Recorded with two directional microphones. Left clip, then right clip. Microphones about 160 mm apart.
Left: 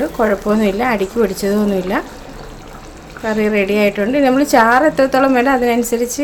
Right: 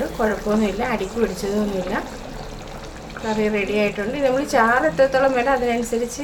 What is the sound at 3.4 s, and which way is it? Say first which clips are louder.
A woman's voice: left 6 dB; 90° left.